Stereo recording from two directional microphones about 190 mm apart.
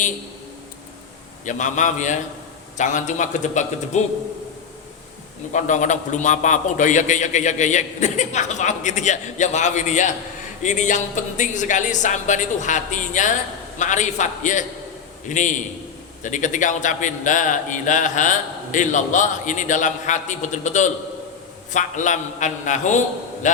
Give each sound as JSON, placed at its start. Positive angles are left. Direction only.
{"t": 1.5, "sound": "a man's voice", "side_deg": 40}
{"t": 5.5, "sound": "a man's voice", "side_deg": 40}